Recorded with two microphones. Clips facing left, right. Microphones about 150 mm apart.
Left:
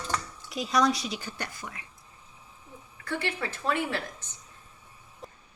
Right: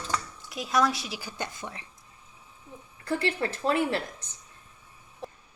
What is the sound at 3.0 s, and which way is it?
A woman's voice, 35° right (ahead or behind).